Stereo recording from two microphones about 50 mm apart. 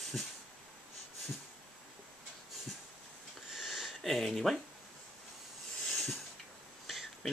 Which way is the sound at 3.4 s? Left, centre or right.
Centre.